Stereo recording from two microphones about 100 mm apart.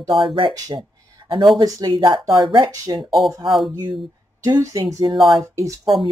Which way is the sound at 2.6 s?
35° right (ahead or behind).